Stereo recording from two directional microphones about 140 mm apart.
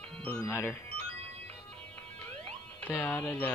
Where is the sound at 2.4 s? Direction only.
15° left (ahead or behind).